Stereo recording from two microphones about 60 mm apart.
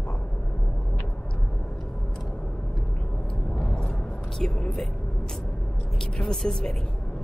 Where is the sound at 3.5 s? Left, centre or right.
Left.